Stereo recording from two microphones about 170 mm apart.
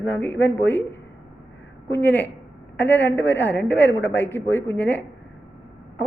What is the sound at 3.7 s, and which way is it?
Speech, 80° left.